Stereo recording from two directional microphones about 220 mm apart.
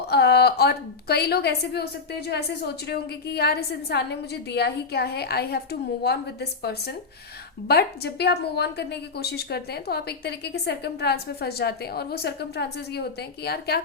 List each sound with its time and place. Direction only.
0.1 s a woman's voice: 45° left (ahead or behind)